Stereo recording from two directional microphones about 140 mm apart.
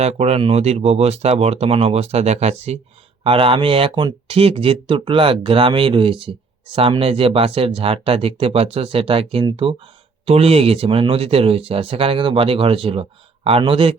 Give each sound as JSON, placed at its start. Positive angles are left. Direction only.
{"t": 0.0, "sound": "speech", "side_deg": -50}